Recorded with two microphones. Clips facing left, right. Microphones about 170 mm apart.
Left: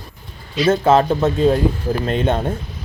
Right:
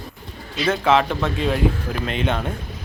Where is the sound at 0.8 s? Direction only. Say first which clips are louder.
Left 2 dB; 40° left (ahead or behind).